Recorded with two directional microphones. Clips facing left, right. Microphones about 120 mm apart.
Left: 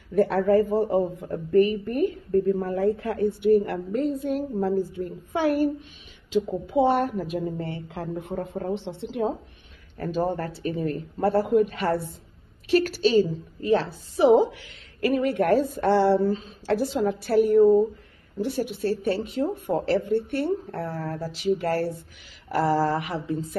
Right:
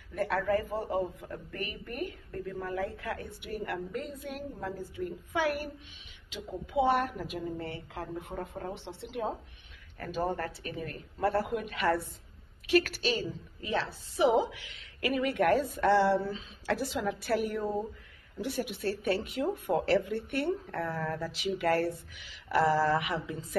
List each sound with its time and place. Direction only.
0.1 s a woman's voice: 30° left (ahead or behind)